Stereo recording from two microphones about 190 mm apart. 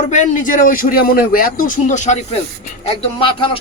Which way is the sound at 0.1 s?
40° left (ahead or behind).